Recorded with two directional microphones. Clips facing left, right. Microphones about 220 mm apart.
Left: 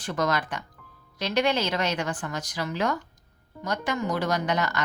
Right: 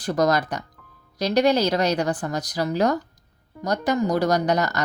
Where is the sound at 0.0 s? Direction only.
40° right (ahead or behind).